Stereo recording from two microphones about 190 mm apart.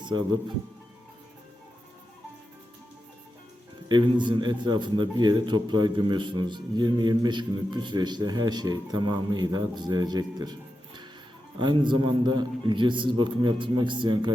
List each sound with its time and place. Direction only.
3.8 s a man's voice: 25° right (ahead or behind)